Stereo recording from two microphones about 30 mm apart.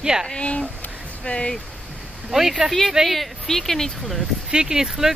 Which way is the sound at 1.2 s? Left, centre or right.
Left.